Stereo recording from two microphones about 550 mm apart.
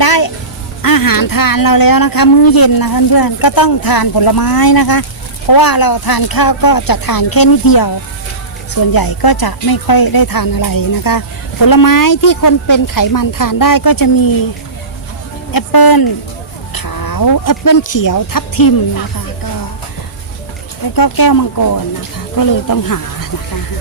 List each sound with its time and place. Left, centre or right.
0.0 s music: left
0.8 s speech: left
15.5 s speech: left
20.9 s speech: left